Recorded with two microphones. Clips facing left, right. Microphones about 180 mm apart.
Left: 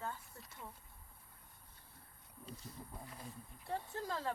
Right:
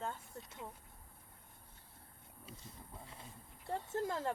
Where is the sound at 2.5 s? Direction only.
5° right (ahead or behind).